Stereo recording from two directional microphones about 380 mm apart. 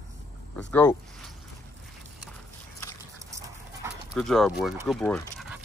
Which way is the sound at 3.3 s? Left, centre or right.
Centre.